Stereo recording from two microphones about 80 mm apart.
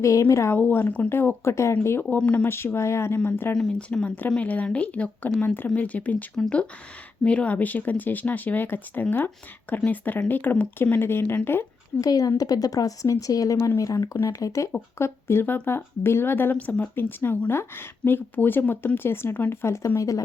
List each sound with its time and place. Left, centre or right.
0.0 s speech: left
0.5 s speech: left
2.0 s speech: centre
3.5 s speech: centre
7.3 s speech: centre
11.9 s speech: left
14.9 s speech: left